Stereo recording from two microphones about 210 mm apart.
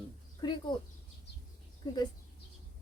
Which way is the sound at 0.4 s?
20° left (ahead or behind).